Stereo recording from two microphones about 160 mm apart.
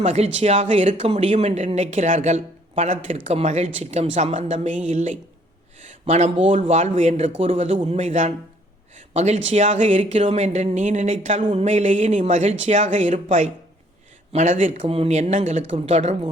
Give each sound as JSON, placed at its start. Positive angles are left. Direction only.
{"t": 0.0, "sound": "speech", "side_deg": -45}